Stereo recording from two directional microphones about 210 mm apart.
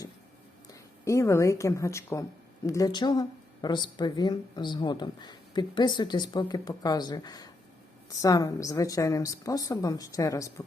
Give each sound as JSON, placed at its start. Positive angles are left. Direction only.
{"t": 0.7, "sound": "a woman's voice", "side_deg": 15}